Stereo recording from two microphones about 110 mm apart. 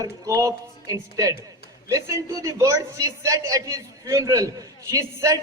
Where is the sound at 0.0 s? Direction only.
30° right (ahead or behind).